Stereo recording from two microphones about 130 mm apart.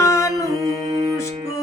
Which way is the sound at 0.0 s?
25° left (ahead or behind).